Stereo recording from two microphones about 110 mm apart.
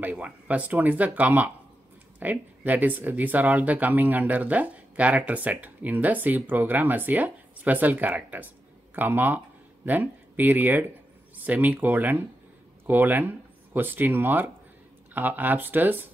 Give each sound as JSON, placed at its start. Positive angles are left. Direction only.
{"t": 0.0, "sound": "speech", "side_deg": -10}